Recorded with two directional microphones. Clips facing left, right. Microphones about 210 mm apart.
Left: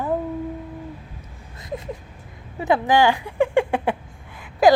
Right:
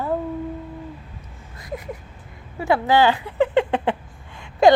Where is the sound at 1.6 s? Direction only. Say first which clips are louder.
Left 1 dB; 25° left (ahead or behind).